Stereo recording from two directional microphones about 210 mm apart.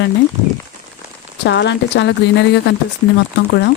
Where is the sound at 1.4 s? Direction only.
55° left (ahead or behind).